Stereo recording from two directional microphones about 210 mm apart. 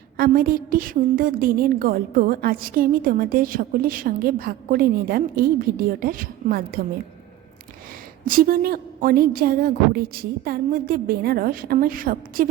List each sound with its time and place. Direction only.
0.2 s a woman's voice: 45° right (ahead or behind)
8.2 s a woman's voice: 40° right (ahead or behind)